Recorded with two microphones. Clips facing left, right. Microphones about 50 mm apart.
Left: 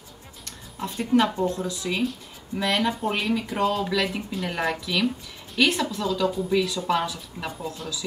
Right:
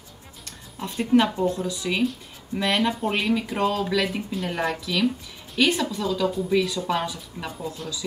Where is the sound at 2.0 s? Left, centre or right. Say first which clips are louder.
Right 2 dB; centre.